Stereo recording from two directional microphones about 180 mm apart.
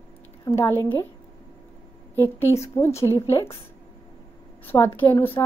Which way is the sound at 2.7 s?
15° left (ahead or behind).